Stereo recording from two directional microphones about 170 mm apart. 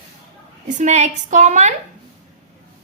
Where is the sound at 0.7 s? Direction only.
45° right (ahead or behind).